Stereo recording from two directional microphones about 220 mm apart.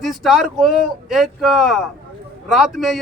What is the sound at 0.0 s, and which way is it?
A man's voice, centre (ahead or behind).